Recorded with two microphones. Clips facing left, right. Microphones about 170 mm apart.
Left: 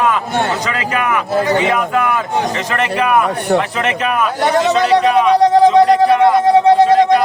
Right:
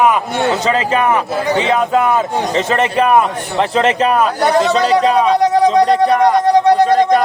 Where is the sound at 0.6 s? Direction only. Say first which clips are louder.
Right 4 dB; 30° right (ahead or behind).